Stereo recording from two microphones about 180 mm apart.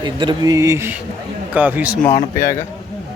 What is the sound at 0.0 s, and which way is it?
Speech, 25° right (ahead or behind).